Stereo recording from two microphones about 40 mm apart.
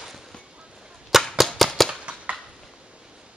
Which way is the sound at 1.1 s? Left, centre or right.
Centre.